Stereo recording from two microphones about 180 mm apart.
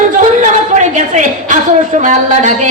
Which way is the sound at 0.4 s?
45° right (ahead or behind).